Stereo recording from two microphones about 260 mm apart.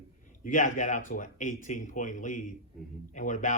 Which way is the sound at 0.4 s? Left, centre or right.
Left.